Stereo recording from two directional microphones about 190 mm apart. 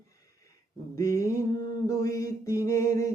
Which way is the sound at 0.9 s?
15° left (ahead or behind).